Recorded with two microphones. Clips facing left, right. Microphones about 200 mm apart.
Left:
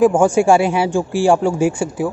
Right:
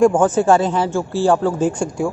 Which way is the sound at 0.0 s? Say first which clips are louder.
Left 1 dB; 10° left (ahead or behind).